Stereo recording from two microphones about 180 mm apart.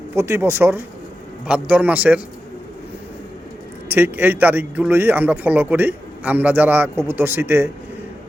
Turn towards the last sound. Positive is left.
turn(degrees=-15)  # may be behind; listen again after turning